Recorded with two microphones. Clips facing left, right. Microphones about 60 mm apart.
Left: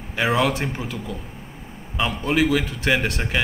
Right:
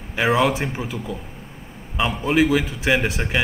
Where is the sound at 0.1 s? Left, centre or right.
Centre.